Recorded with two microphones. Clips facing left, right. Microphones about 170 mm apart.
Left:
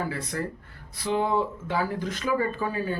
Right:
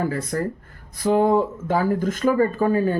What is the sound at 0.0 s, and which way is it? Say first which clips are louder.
Speech: right 6 dB; 45° right (ahead or behind).